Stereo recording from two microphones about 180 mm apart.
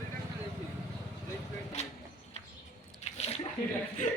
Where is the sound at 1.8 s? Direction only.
40° left (ahead or behind).